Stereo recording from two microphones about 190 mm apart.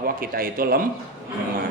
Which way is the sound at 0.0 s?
50° right (ahead or behind).